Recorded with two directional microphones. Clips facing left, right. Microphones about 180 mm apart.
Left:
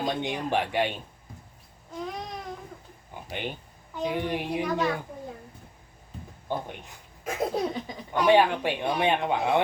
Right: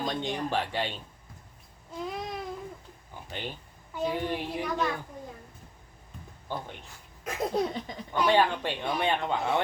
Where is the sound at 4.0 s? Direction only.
15° left (ahead or behind).